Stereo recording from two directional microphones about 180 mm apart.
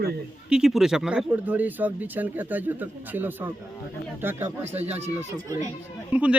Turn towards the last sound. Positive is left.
turn(degrees=-10)  # may be behind; listen again after turning